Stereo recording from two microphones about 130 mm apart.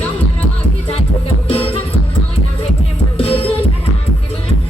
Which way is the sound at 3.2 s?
45° left (ahead or behind).